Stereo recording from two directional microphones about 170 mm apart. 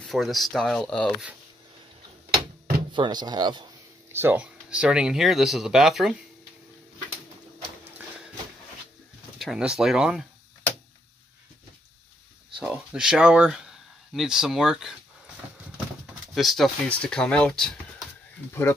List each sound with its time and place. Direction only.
0.0 s speech: centre (ahead or behind)
2.9 s speech: 25° right (ahead or behind)
4.1 s speech: 10° right (ahead or behind)
9.4 s speech: 5° right (ahead or behind)
12.5 s speech: 5° right (ahead or behind)
16.3 s speech: centre (ahead or behind)
18.5 s speech: 15° left (ahead or behind)